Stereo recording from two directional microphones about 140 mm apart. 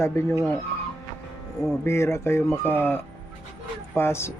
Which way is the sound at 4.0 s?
20° left (ahead or behind).